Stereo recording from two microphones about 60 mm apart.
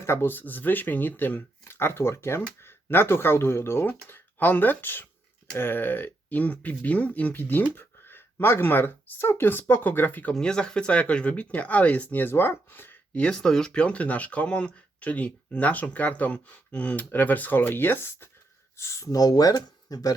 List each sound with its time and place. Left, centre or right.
0.0 s speech: left
10.3 s speech: centre; by 13.0 s left
13.3 s speech: centre; by 18.3 s left
18.8 s speech: left